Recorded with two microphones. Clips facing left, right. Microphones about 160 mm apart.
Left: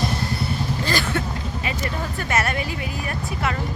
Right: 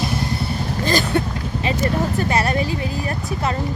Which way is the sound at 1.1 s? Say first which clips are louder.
Right 5 dB; 25° right (ahead or behind).